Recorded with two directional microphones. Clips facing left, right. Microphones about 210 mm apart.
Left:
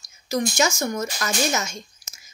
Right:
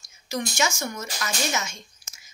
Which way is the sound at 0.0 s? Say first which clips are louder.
Left 5 dB; 40° left (ahead or behind).